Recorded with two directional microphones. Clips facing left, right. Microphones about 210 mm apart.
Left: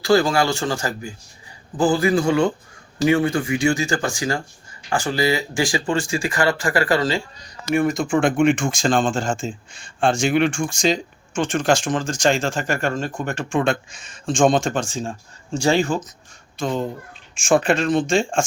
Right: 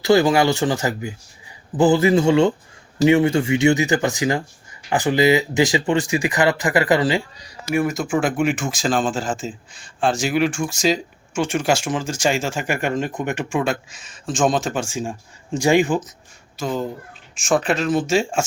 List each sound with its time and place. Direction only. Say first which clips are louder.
0.0 s speech: right 2 dB; 20° right (ahead or behind)
7.7 s speech: left 1 dB; 5° right (ahead or behind)